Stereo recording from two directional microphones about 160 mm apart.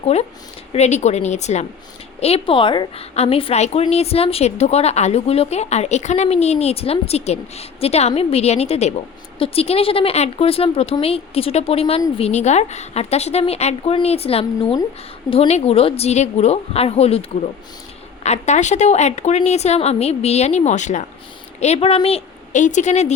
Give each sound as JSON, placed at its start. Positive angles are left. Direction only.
{"t": 0.0, "sound": "a woman's voice", "side_deg": 40}